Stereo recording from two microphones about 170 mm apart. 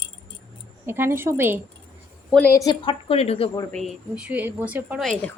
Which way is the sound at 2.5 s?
25° left (ahead or behind).